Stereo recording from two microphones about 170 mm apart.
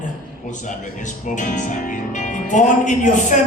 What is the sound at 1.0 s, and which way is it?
Speech, 45° left (ahead or behind).